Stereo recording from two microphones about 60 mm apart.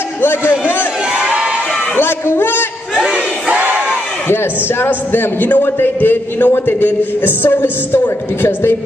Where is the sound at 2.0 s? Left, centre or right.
Left.